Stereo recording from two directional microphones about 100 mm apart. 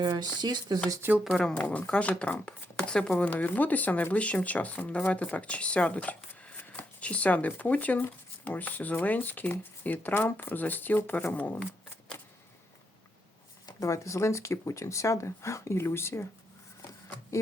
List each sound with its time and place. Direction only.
0.0 s speech: 45° right (ahead or behind)
1.4 s speech: 15° left (ahead or behind)
13.7 s speech: 35° left (ahead or behind)